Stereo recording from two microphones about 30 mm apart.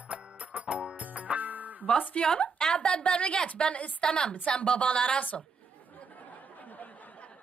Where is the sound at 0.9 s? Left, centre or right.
Right.